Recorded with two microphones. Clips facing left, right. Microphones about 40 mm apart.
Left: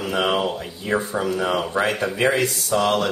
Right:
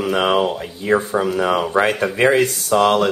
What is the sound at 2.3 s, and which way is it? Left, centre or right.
Speech, right.